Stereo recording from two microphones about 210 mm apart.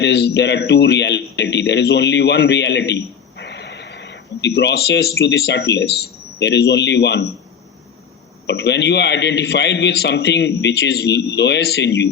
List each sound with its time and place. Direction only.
0.0 s a man's voice: 50° left (ahead or behind)
8.4 s a man's voice: 55° left (ahead or behind)